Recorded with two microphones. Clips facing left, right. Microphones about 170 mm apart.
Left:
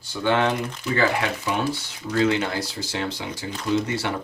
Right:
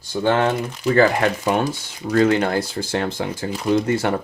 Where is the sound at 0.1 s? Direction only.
45° right (ahead or behind).